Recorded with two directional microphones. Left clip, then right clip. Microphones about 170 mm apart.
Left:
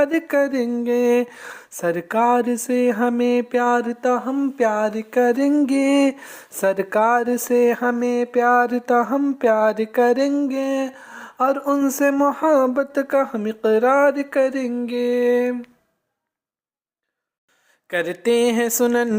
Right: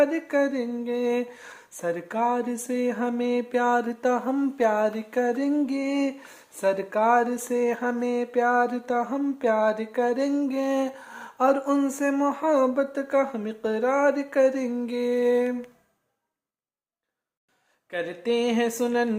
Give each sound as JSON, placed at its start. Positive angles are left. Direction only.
{"t": 0.0, "sound": "speech", "side_deg": 40}
{"t": 5.2, "sound": "speech", "side_deg": 35}
{"t": 10.3, "sound": "speech", "side_deg": 15}
{"t": 14.7, "sound": "a sound", "side_deg": 15}
{"t": 17.8, "sound": "speech", "side_deg": 40}